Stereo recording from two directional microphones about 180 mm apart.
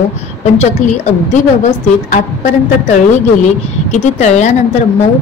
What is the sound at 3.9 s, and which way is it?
Speech, 40° left (ahead or behind).